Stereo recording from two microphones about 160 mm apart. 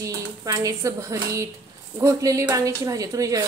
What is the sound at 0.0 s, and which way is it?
A woman's voice, 20° right (ahead or behind).